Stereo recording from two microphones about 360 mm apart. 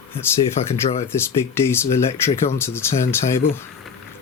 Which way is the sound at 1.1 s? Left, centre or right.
Centre.